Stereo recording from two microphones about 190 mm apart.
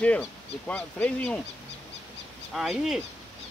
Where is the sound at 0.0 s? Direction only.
5° left (ahead or behind).